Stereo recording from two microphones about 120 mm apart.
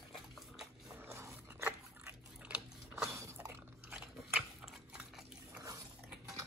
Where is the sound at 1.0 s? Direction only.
20° right (ahead or behind).